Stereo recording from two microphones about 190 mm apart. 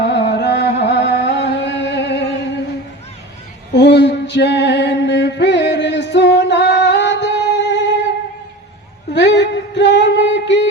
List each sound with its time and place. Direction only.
0.0 s music: 65° left (ahead or behind)
3.8 s a sound: 65° left (ahead or behind)
9.1 s music: 65° left (ahead or behind)